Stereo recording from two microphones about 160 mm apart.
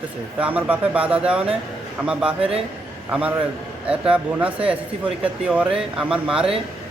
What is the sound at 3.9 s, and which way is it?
Speech, 5° right (ahead or behind).